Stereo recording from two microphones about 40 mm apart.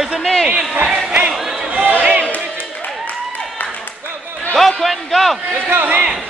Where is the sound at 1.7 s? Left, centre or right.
Right.